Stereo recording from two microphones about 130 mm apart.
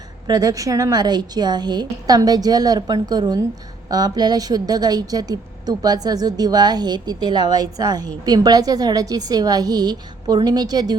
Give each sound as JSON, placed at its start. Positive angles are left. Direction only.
{"t": 0.3, "sound": "a woman's voice", "side_deg": -30}